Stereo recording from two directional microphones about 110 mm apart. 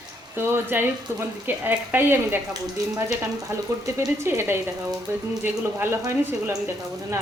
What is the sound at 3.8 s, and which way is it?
Speech, 25° right (ahead or behind).